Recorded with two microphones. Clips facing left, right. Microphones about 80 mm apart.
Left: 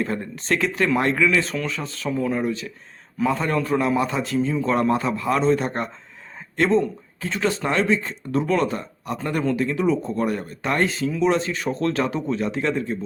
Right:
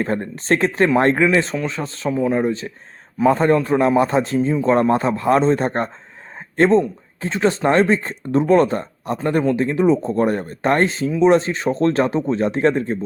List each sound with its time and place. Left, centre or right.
0.0 s speech: right